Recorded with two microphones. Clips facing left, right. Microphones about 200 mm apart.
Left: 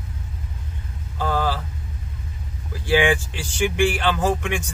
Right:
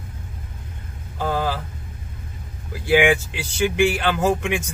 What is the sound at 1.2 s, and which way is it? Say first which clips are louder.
Speech: even; 15° right (ahead or behind).